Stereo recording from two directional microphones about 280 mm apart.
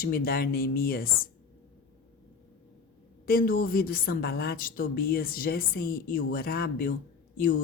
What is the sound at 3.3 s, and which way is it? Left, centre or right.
A woman's voice, left.